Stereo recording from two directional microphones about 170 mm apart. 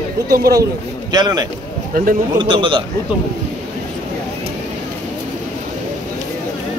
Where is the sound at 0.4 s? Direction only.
20° right (ahead or behind).